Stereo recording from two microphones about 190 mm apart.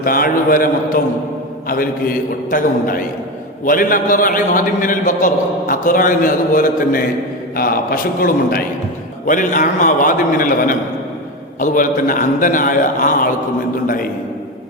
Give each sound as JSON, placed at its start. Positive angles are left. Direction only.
{"t": 0.0, "sound": "a man's voice", "side_deg": 50}